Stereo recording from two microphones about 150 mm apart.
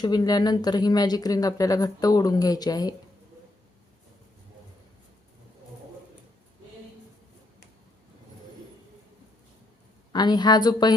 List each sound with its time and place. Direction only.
0.0 s speech: 25° left (ahead or behind)
10.1 s speech: 30° left (ahead or behind)